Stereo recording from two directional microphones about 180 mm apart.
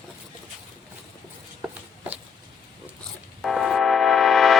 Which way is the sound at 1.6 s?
10° right (ahead or behind).